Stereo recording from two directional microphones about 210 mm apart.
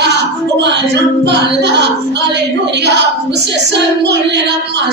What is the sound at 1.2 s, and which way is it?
Speech, 55° right (ahead or behind).